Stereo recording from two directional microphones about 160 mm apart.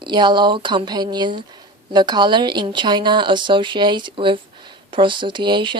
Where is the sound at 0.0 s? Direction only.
30° right (ahead or behind).